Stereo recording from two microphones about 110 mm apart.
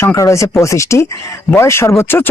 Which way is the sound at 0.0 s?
25° left (ahead or behind).